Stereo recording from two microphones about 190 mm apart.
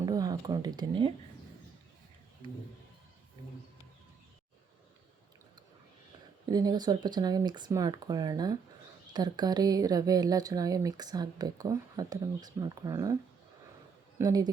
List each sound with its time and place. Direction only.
0.0 s speech: 20° right (ahead or behind)
6.4 s speech: 20° right (ahead or behind)
14.2 s speech: 20° right (ahead or behind)